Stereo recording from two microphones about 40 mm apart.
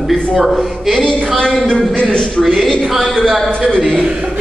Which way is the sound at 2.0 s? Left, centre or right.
Centre.